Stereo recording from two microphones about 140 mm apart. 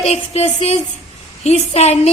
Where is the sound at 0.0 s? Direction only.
50° left (ahead or behind).